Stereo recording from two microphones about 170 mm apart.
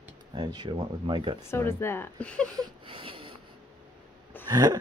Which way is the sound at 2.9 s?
30° right (ahead or behind).